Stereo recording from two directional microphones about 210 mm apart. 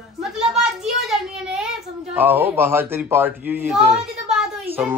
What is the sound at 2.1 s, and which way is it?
Speech, 10° right (ahead or behind).